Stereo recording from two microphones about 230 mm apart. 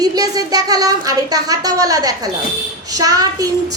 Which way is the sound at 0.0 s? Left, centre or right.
Centre.